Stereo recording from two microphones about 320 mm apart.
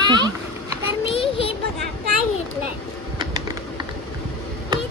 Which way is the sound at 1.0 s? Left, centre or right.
Centre.